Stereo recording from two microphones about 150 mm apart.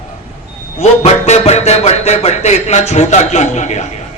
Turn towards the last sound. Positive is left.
turn(degrees=50)  # may be behind; listen again after turning